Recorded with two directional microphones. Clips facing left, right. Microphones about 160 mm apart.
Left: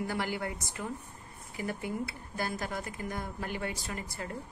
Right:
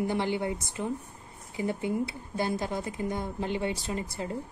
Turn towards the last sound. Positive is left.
turn(degrees=-25)  # may be behind; listen again after turning